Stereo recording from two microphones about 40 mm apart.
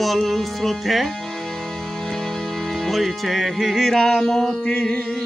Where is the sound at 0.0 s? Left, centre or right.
Centre.